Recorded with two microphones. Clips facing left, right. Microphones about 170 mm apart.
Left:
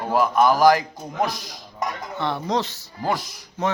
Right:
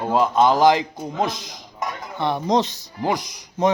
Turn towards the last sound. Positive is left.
turn(degrees=-20)  # may be behind; listen again after turning